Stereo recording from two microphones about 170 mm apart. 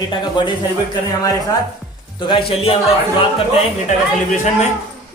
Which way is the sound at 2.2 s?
30° left (ahead or behind).